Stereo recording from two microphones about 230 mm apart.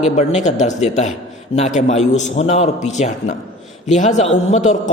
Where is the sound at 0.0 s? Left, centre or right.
Left.